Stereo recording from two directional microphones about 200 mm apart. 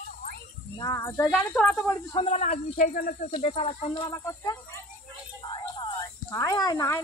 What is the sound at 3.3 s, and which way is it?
Speech, 25° left (ahead or behind).